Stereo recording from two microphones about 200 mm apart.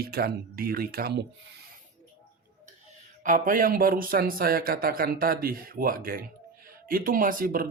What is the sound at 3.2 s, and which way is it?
Speech, 40° right (ahead or behind).